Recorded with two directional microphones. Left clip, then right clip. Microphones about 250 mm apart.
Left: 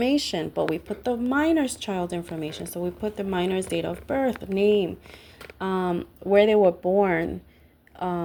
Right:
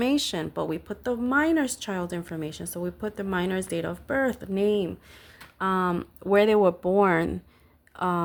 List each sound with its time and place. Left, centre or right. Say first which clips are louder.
0.0 s speech: left 1 dB; right
0.3 s speech: left 4 dB; centre